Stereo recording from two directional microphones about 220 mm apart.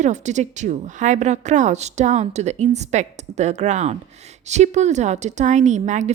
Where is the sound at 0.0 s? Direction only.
30° right (ahead or behind).